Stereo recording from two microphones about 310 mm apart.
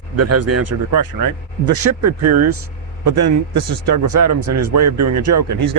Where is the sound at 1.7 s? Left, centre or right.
Right.